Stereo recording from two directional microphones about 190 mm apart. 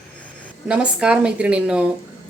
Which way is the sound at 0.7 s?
5° right (ahead or behind).